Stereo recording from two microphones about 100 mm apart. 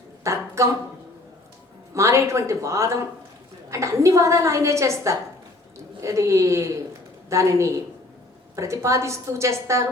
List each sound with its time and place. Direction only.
0.3 s a woman's voice: 30° right (ahead or behind)
2.0 s a woman's voice: 30° right (ahead or behind)